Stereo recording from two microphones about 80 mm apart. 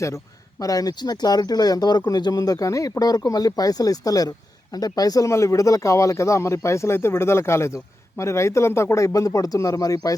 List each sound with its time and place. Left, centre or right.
0.6 s speech: left
5.3 s speech: left